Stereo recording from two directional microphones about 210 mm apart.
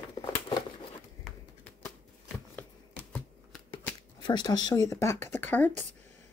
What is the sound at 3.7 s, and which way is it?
Speech, 20° left (ahead or behind).